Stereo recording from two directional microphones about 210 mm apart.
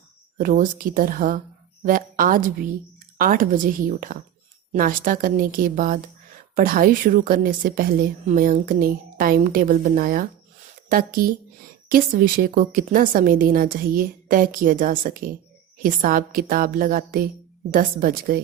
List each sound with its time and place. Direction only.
0.3 s a woman's voice: 40° right (ahead or behind)